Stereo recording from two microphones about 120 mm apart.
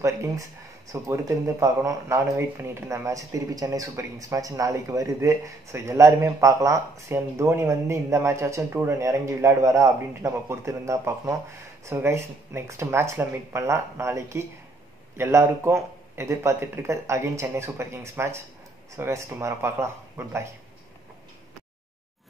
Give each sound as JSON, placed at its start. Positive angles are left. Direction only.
{"t": 0.0, "sound": "speech", "side_deg": -25}